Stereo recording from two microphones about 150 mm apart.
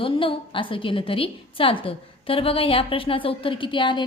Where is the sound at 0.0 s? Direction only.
35° left (ahead or behind).